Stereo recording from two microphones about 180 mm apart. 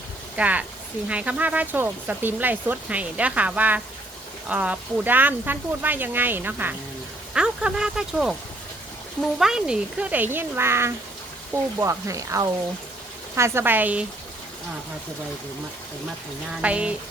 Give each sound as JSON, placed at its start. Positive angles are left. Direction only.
{"t": 0.3, "sound": "speech", "side_deg": -10}
{"t": 9.4, "sound": "speech", "side_deg": -5}
{"t": 16.6, "sound": "speech", "side_deg": -5}